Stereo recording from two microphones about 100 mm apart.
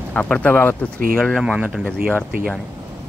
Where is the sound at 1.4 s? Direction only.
10° right (ahead or behind).